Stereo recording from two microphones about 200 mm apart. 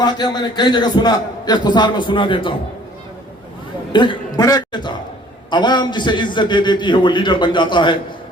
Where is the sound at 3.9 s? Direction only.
25° left (ahead or behind).